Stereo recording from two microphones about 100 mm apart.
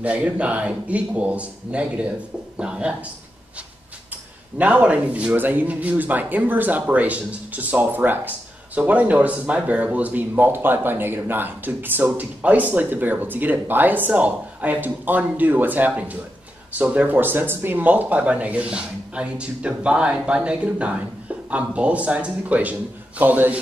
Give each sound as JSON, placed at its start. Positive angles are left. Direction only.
{"t": 0.0, "sound": "speech", "side_deg": -15}
{"t": 4.6, "sound": "speech", "side_deg": -15}